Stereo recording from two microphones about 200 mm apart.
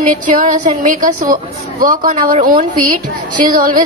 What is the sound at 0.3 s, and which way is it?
A woman's voice, 40° right (ahead or behind).